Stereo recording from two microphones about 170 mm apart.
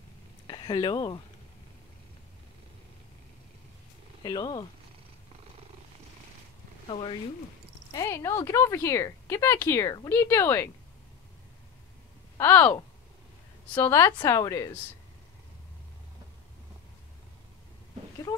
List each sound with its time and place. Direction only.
0.5 s speech: 25° left (ahead or behind)
4.2 s a woman's voice: 25° left (ahead or behind)
6.9 s speech: 30° left (ahead or behind)
7.9 s speech: 15° left (ahead or behind)
12.4 s speech: 15° left (ahead or behind)
13.7 s a woman's voice: 20° left (ahead or behind)